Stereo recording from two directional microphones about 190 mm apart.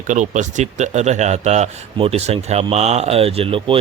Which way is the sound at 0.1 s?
40° right (ahead or behind).